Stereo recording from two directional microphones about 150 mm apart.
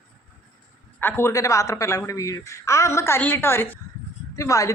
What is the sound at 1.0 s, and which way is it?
A woman's voice, 15° left (ahead or behind).